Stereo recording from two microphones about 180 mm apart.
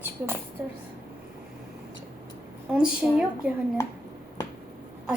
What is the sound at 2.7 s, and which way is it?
Speech, 5° right (ahead or behind).